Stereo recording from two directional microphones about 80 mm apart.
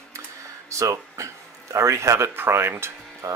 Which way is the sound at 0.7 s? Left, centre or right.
Right.